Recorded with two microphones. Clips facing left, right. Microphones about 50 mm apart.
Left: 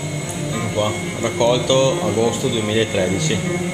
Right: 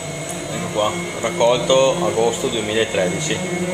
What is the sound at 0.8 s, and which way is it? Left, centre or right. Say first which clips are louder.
Speech: right 2 dB; centre.